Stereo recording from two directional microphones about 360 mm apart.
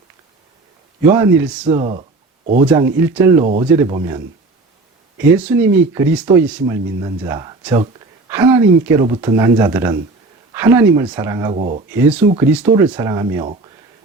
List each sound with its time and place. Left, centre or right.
1.0 s speech: centre
1.6 s speech: centre
3.4 s speech: right
3.7 s speech: centre
11.9 s speech: centre